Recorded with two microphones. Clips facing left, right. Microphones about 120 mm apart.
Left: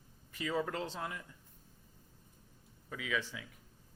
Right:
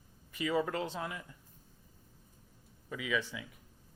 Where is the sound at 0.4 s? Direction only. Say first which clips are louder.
Right 3 dB; 65° right (ahead or behind).